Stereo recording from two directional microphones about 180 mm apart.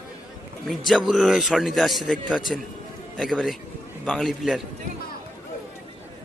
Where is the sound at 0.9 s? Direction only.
Centre (ahead or behind).